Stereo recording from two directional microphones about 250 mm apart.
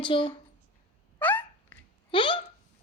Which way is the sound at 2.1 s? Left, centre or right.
Left.